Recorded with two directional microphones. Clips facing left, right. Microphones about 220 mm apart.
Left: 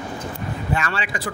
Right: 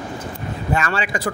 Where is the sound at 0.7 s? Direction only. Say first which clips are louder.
Right 5 dB; 45° right (ahead or behind).